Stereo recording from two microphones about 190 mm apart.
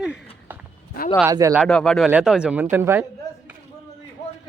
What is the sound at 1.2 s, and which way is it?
Speech, 15° right (ahead or behind).